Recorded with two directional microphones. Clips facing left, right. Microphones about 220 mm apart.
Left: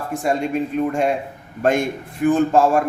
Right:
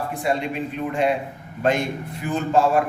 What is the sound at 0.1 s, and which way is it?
A man's voice, 45° left (ahead or behind).